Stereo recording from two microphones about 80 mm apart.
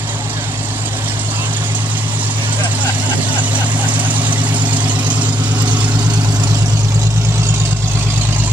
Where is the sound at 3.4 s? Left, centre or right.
Centre.